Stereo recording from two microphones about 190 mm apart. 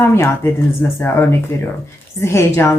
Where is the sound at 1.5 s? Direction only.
15° left (ahead or behind).